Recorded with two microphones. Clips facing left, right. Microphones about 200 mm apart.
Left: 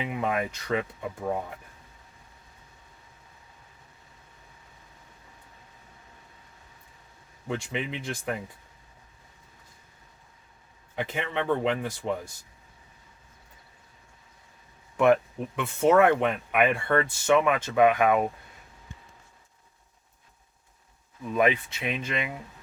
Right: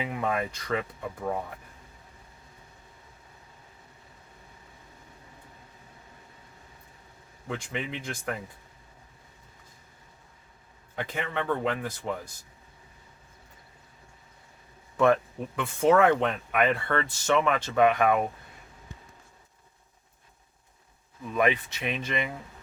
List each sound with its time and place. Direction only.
0.1 s speech: 15° left (ahead or behind)
7.4 s speech: 15° left (ahead or behind)
10.9 s a man's voice: 20° left (ahead or behind)
14.9 s speech: 15° left (ahead or behind)
21.4 s speech: 20° left (ahead or behind)